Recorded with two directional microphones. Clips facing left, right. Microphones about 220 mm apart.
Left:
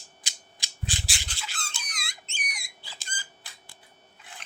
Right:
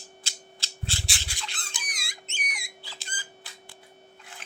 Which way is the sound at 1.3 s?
10° right (ahead or behind).